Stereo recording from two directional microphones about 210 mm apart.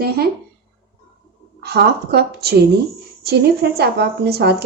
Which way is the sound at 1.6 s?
50° right (ahead or behind).